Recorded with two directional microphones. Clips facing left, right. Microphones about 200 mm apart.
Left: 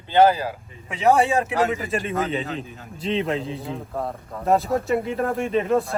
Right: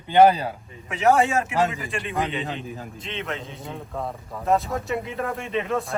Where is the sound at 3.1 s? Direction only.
35° left (ahead or behind).